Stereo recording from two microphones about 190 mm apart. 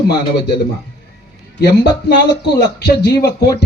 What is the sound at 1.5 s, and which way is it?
Speech, 60° left (ahead or behind).